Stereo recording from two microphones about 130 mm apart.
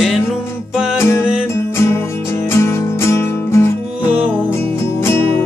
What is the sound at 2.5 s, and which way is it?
Music, 20° left (ahead or behind).